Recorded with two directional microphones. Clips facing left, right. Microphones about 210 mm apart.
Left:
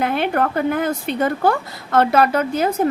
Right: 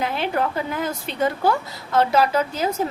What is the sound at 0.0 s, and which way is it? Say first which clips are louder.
A woman's voice: left 4 dB; 55° left (ahead or behind).